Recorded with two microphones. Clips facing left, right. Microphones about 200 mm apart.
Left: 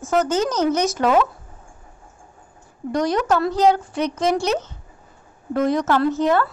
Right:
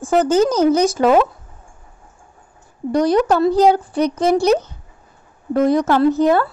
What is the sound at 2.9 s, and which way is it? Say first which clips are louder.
A woman's voice: right 5 dB; 35° right (ahead or behind).